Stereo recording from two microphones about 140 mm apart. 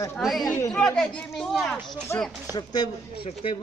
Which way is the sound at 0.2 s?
Centre (ahead or behind).